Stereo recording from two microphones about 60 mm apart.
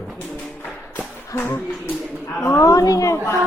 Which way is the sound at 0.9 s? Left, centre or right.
Left.